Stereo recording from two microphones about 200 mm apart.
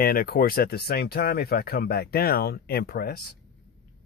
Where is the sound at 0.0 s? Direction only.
50° left (ahead or behind).